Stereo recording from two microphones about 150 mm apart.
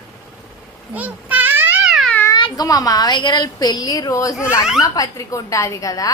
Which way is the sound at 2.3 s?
30° left (ahead or behind).